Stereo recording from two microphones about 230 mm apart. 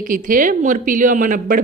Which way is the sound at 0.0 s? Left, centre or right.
Right.